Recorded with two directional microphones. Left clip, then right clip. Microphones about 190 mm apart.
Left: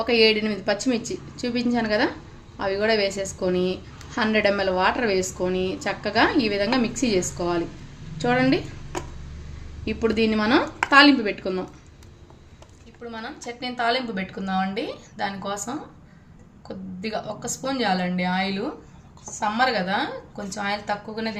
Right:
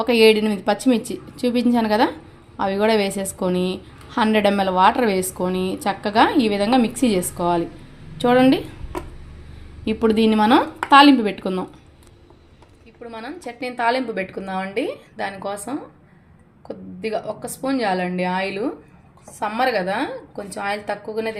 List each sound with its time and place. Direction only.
0.0 s a woman's voice: 30° right (ahead or behind)
9.8 s a woman's voice: 35° right (ahead or behind)
13.1 s a woman's voice: 35° right (ahead or behind)
17.0 s a woman's voice: 35° right (ahead or behind)